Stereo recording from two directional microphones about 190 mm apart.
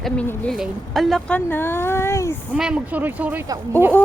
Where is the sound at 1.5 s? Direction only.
10° left (ahead or behind).